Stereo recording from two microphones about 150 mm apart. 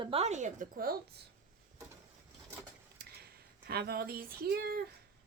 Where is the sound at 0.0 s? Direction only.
40° right (ahead or behind); by 0.9 s 70° right (ahead or behind).